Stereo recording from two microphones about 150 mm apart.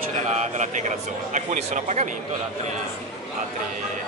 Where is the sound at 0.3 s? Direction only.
50° right (ahead or behind).